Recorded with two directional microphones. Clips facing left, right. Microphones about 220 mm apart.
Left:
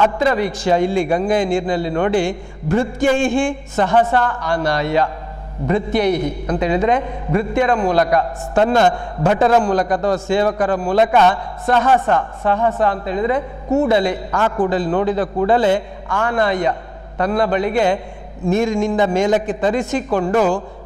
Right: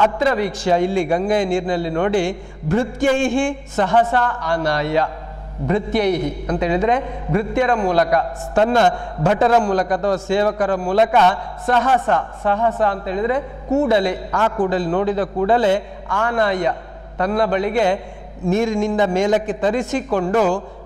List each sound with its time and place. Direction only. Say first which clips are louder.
0.0 s a man's voice: left 1 dB; 15° left (ahead or behind)